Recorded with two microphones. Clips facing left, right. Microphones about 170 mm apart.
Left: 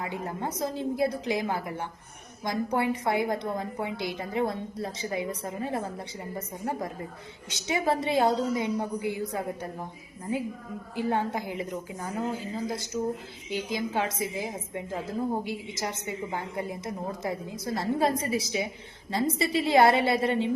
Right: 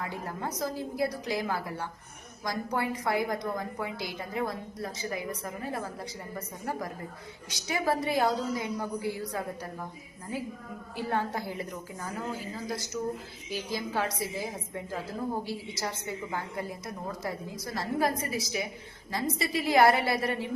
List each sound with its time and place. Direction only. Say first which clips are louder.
0.0 s a woman's voice: left 3 dB; 20° left (ahead or behind)
10.9 s a woman's voice: left 3 dB; 20° left (ahead or behind)